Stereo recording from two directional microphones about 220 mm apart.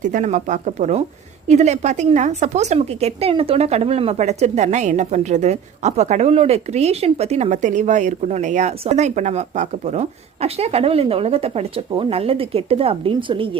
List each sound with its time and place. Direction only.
0.0 s a woman's voice: 35° right (ahead or behind)